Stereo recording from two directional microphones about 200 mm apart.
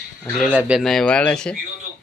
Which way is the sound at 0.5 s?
5° right (ahead or behind).